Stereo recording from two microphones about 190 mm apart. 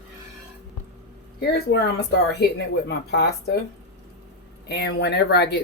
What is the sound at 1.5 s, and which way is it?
Speech, 60° left (ahead or behind).